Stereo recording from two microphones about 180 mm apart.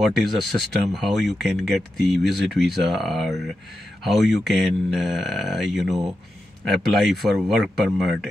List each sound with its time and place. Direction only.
0.0 s speech: centre (ahead or behind)